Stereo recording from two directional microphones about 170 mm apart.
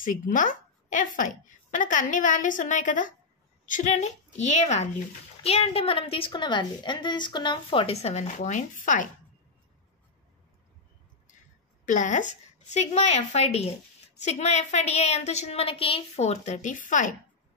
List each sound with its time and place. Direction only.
0.0 s a woman's voice: 50° left (ahead or behind)
11.8 s a woman's voice: 45° left (ahead or behind)